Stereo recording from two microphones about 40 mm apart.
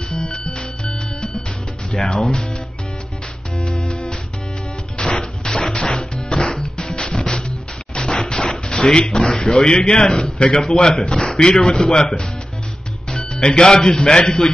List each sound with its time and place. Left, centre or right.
0.1 s music: left
1.9 s a man's voice: centre
5.0 s music: centre
9.3 s a man's voice: centre